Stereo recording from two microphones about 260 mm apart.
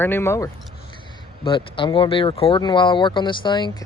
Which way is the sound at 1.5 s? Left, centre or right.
Centre.